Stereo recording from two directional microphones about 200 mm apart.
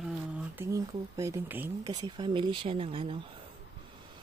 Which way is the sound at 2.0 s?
25° right (ahead or behind).